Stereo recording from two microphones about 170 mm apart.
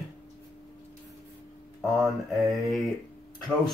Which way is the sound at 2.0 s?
Centre (ahead or behind).